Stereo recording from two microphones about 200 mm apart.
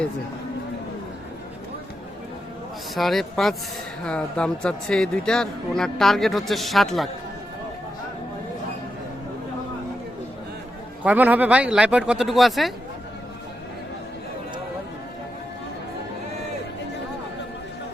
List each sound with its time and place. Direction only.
2.9 s speech: centre (ahead or behind)
11.0 s speech: 5° right (ahead or behind)